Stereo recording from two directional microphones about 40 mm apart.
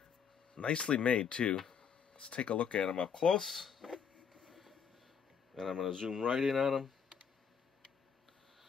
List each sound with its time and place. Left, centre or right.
0.6 s speech: left
2.9 s speech: centre
3.3 s a sound: centre
5.5 s speech: centre
6.0 s speech: centre